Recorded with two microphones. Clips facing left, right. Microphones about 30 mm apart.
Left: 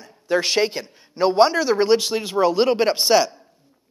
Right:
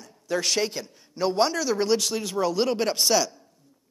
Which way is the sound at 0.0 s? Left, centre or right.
Left.